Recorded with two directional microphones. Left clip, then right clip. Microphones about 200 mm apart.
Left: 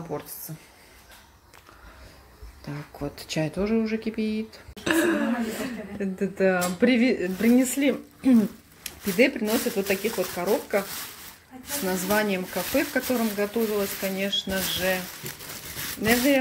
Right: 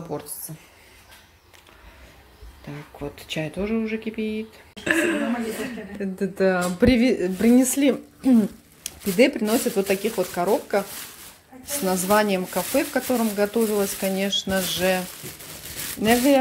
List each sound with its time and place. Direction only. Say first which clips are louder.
2.6 s speech: even; 5° left (ahead or behind)
4.9 s speech: right 1 dB; 5° right (ahead or behind)
8.2 s speech: right 2 dB; 5° right (ahead or behind)
11.8 s speech: right 5 dB; 10° right (ahead or behind)